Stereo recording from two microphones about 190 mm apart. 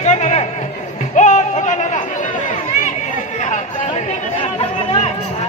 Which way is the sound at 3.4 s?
35° left (ahead or behind).